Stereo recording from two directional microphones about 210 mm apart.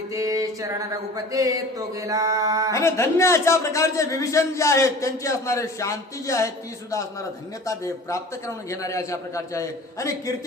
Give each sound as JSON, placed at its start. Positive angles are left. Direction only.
{"t": 0.1, "sound": "mantra", "side_deg": -15}
{"t": 2.7, "sound": "a man's voice", "side_deg": 15}